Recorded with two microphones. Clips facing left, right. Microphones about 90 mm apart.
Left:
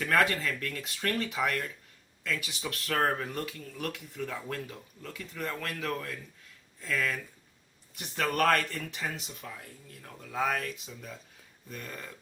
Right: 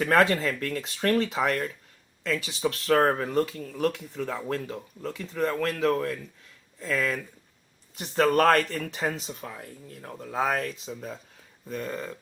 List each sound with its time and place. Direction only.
0.1 s speech: 30° right (ahead or behind)